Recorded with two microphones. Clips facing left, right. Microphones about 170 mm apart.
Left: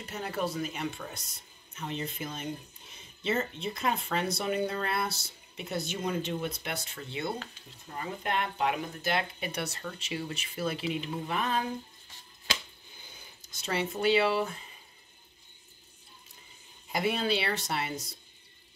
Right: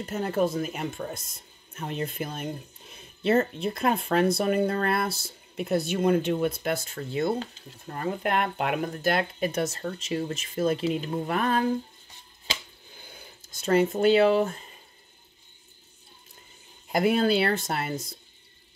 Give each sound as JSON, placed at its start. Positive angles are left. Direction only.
{"t": 0.0, "sound": "speech", "side_deg": -45}
{"t": 13.6, "sound": "speech", "side_deg": -50}
{"t": 16.9, "sound": "speech", "side_deg": -50}